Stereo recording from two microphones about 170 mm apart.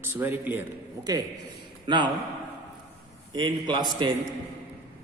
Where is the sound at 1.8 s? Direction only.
25° right (ahead or behind).